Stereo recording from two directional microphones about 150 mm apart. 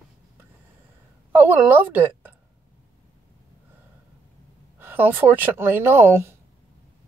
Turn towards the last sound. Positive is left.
turn(degrees=-15)  # may be behind; listen again after turning